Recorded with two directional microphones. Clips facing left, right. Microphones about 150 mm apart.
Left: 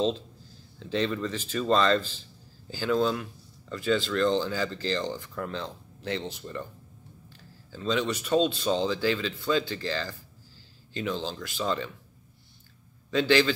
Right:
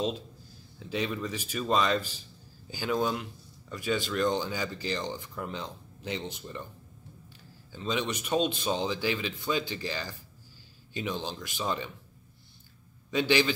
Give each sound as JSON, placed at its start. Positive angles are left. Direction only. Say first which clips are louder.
{"t": 0.7, "sound": "speech", "louder": "left 4 dB", "side_deg": -10}
{"t": 13.1, "sound": "speech", "louder": "left 3 dB", "side_deg": -15}